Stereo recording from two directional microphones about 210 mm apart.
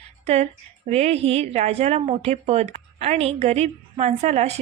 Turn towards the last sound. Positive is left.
turn(degrees=-30)  # may be behind; listen again after turning